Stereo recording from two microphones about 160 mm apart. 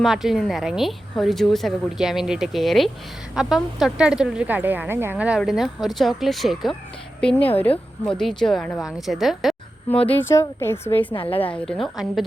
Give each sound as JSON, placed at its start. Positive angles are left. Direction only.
{"t": 0.0, "sound": "a woman's voice", "side_deg": 0}
{"t": 10.2, "sound": "a woman's voice", "side_deg": 15}
{"t": 11.1, "sound": "a woman's voice", "side_deg": 35}
{"t": 11.3, "sound": "speech", "side_deg": 10}